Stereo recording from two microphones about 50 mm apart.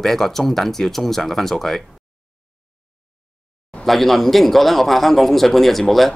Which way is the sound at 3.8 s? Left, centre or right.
Centre.